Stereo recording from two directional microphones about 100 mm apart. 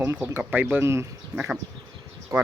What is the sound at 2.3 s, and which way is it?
Speech, 30° right (ahead or behind).